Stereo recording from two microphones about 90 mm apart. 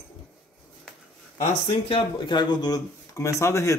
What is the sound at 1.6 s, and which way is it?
Speech, 75° left (ahead or behind).